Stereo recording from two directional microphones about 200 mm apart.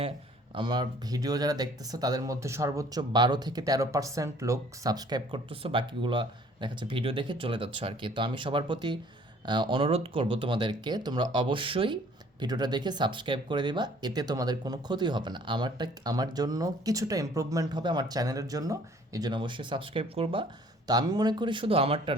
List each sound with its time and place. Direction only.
0.5 s speech: 25° right (ahead or behind)